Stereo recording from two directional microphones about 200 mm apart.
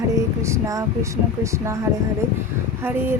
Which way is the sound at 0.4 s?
15° right (ahead or behind).